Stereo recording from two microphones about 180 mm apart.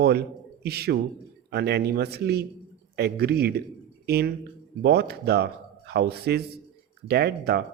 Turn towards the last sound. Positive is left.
turn(degrees=-60)  # may be behind; listen again after turning